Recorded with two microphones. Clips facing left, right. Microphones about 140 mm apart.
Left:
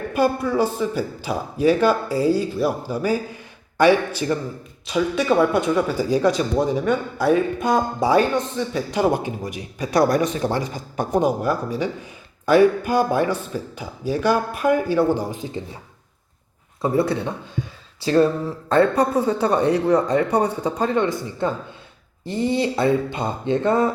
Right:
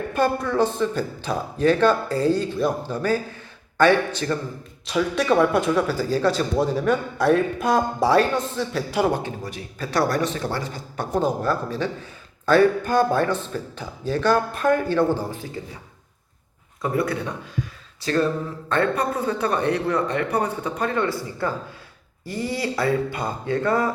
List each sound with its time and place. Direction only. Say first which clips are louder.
0.1 s a man's voice: left 3 dB; 10° left (ahead or behind)
5.9 s speech: left 2 dB; 15° left (ahead or behind)
6.8 s a man's voice: even; centre (ahead or behind)
9.0 s speech: left 3 dB; 10° left (ahead or behind)
16.8 s a man's voice: left 4 dB; 25° left (ahead or behind)